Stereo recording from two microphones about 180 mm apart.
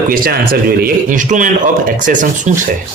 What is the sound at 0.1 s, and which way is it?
Speech, 55° right (ahead or behind).